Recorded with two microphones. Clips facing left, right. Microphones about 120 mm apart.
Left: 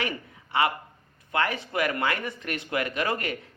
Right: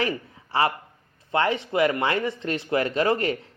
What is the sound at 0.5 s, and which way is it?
Speech, 30° right (ahead or behind).